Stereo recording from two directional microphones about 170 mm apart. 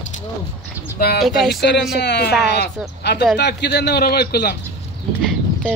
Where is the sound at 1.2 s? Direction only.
Centre (ahead or behind).